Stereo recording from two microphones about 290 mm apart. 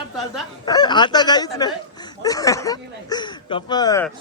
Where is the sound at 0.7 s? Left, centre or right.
Centre.